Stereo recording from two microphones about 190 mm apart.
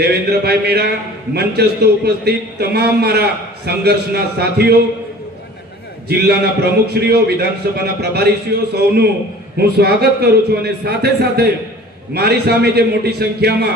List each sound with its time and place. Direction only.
0.0 s a man's voice: 60° right (ahead or behind)
6.1 s a man's voice: 55° right (ahead or behind)